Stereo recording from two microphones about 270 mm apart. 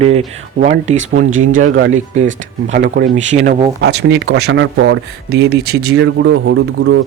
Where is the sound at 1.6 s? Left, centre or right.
Right.